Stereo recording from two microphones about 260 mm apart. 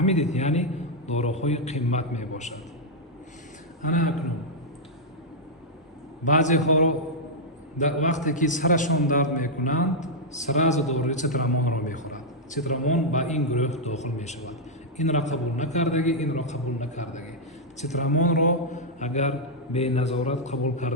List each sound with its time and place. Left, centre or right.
0.0 s a man's voice: left
6.2 s a man's voice: left